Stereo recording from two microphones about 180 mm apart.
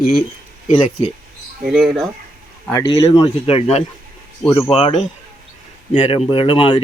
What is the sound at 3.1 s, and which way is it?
Speech, 35° left (ahead or behind).